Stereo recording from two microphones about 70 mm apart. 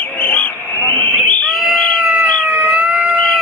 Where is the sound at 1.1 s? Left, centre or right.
Left.